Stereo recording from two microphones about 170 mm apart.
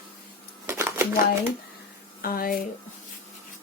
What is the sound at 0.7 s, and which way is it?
Shuffling cards, 15° right (ahead or behind).